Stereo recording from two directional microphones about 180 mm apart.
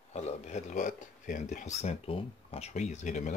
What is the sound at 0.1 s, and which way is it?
Speech, 40° left (ahead or behind).